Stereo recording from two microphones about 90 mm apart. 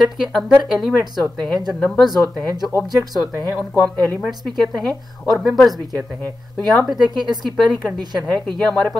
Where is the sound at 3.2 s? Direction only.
45° left (ahead or behind).